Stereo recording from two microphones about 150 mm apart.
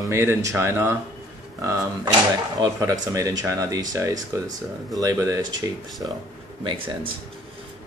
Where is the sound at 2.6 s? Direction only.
25° right (ahead or behind).